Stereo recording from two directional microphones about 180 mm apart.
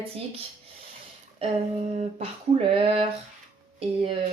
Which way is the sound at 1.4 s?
35° right (ahead or behind).